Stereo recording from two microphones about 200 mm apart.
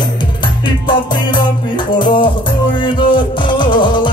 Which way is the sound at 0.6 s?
25° left (ahead or behind).